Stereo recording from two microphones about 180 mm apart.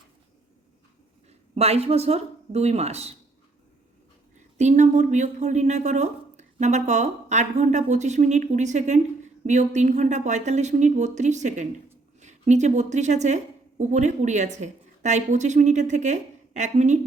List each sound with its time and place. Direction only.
1.3 s speech: 35° right (ahead or behind)
4.5 s a woman's voice: 40° right (ahead or behind)